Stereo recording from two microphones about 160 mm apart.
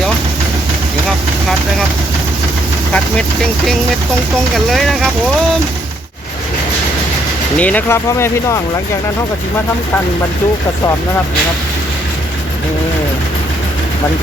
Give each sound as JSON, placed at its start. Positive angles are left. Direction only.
{"t": 4.5, "sound": "speech", "side_deg": 0}
{"t": 7.6, "sound": "speech", "side_deg": 10}